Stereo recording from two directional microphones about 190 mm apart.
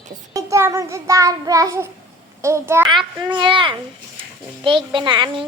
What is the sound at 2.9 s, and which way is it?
A child's voice, 25° right (ahead or behind).